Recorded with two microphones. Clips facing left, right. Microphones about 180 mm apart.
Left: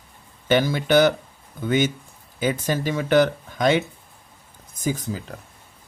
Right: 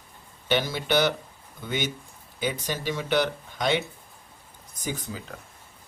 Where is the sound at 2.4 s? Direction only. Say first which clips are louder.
Left 6 dB; 45° left (ahead or behind).